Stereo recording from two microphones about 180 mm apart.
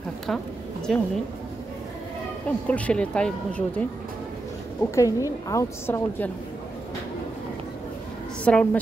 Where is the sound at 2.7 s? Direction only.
5° left (ahead or behind).